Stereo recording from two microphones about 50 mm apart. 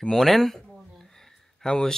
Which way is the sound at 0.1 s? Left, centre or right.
Centre.